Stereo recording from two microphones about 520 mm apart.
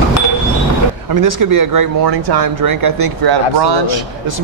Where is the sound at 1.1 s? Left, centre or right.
Right.